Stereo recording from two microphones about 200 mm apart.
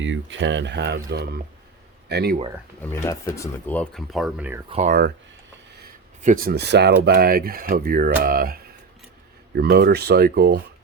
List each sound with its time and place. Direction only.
0.0 s speech: 70° right (ahead or behind); by 2.4 s 50° right (ahead or behind)
2.8 s speech: 15° left (ahead or behind); by 4.6 s 5° right (ahead or behind)
4.7 s speech: 40° right (ahead or behind)
6.2 s speech: 45° right (ahead or behind)